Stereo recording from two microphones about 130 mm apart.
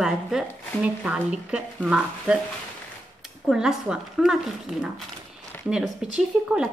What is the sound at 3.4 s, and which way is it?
A woman's voice, 5° right (ahead or behind).